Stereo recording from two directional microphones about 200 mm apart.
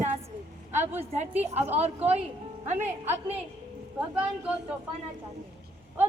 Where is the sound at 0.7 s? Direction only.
35° right (ahead or behind).